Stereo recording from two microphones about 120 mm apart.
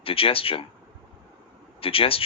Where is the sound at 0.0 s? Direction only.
50° left (ahead or behind).